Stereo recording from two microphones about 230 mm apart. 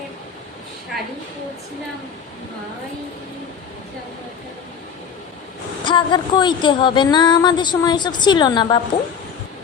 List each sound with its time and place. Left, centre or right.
5.8 s speech: left